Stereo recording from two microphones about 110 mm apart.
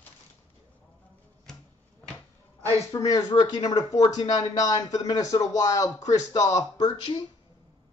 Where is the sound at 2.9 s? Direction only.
30° left (ahead or behind).